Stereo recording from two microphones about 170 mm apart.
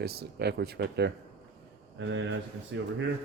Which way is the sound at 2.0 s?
90° right.